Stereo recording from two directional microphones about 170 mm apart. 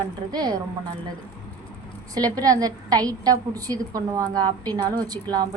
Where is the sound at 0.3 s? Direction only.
25° right (ahead or behind).